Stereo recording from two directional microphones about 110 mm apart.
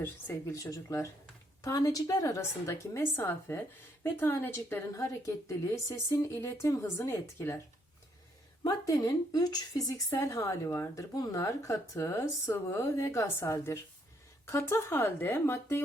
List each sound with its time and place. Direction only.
0.0 s speech: 15° left (ahead or behind)
0.5 s speech: 30° left (ahead or behind)
4.9 s speech: 30° left (ahead or behind)
8.6 s speech: 35° left (ahead or behind)